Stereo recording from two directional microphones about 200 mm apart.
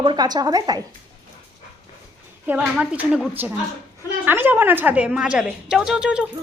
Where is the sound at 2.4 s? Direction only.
5° right (ahead or behind).